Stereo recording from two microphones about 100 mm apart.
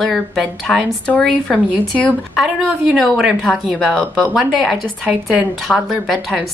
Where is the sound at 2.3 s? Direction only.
5° right (ahead or behind).